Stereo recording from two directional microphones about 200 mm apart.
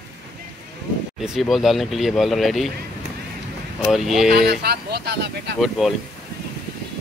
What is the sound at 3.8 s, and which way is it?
Speech, centre (ahead or behind).